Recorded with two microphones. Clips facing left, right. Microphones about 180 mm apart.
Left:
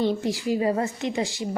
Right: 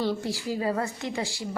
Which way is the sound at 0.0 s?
20° left (ahead or behind).